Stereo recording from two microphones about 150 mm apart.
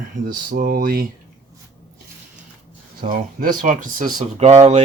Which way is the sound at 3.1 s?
65° right (ahead or behind).